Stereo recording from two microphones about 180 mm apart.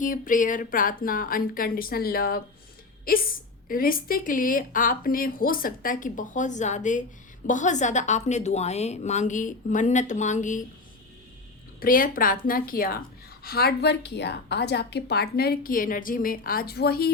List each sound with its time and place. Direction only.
0.0 s speech: 45° left (ahead or behind)
3.7 s a woman's voice: 50° left (ahead or behind)
11.8 s a woman's voice: 50° left (ahead or behind)